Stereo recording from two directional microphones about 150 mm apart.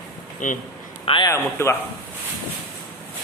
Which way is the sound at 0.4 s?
60° left (ahead or behind).